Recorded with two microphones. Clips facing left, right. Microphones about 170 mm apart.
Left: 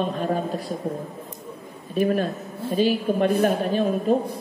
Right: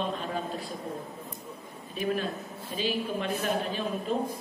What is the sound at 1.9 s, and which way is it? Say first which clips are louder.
Speech: left 8 dB; 45° left (ahead or behind).